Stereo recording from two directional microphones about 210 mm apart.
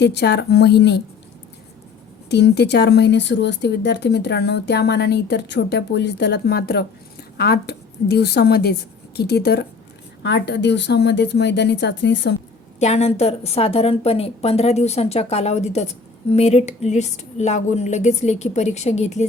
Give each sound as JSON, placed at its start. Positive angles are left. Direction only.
{"t": 0.0, "sound": "speech", "side_deg": 55}
{"t": 2.3, "sound": "a woman's voice", "side_deg": 55}
{"t": 12.8, "sound": "a woman's voice", "side_deg": 30}